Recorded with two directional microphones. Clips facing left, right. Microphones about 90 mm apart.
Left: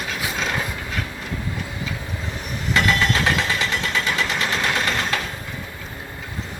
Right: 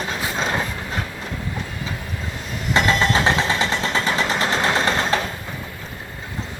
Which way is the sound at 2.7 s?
30° right (ahead or behind).